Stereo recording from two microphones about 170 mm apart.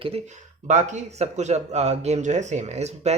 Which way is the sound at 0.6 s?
45° right (ahead or behind).